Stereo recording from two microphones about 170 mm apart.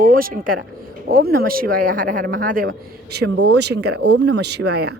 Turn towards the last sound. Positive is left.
turn(degrees=-70)  # may be behind; listen again after turning